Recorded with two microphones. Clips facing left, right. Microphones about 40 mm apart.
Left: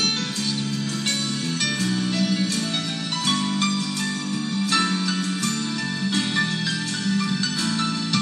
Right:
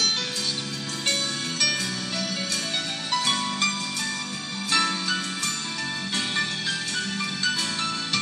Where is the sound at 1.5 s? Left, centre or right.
Left.